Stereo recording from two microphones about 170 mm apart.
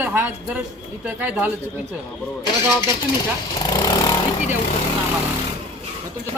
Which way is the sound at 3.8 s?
20° left (ahead or behind).